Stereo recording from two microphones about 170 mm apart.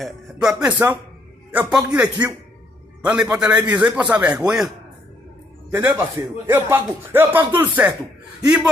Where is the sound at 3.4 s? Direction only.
10° right (ahead or behind).